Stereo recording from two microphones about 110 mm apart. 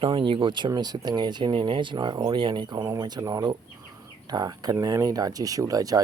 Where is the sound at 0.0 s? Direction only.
50° right (ahead or behind).